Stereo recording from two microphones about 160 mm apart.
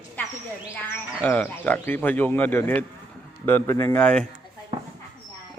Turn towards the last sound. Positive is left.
turn(degrees=5)  # may be behind; listen again after turning